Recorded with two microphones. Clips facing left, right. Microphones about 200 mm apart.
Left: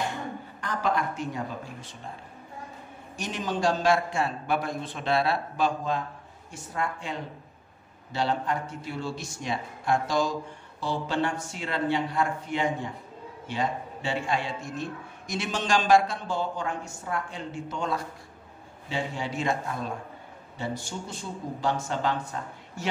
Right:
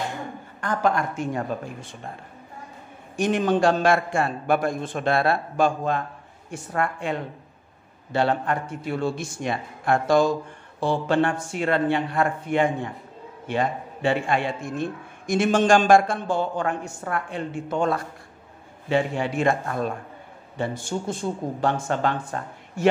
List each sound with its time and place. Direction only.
0.6 s a man's voice: 50° right (ahead or behind)
3.2 s a man's voice: 55° right (ahead or behind)